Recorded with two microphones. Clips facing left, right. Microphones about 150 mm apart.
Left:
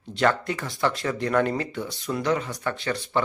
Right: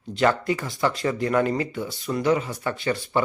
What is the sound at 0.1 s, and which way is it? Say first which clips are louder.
Speech: right 2 dB; centre (ahead or behind).